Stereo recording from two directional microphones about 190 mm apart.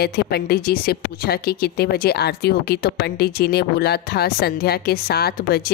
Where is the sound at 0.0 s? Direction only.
55° left (ahead or behind).